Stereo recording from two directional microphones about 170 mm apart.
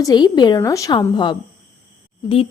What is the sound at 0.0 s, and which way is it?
Speech, 25° left (ahead or behind).